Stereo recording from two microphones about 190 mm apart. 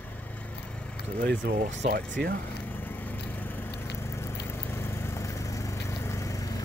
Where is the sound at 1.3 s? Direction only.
60° right (ahead or behind).